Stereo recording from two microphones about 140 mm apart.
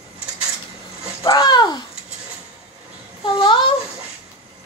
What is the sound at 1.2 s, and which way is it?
Babbling, 30° left (ahead or behind).